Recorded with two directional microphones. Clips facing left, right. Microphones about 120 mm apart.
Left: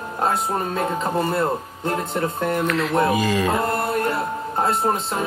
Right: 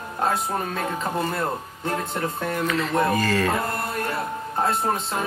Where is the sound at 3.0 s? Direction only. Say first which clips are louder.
Left 2 dB; 15° left (ahead or behind).